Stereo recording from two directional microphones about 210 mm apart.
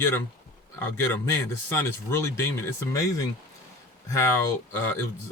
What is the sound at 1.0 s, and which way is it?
Speech, 10° left (ahead or behind).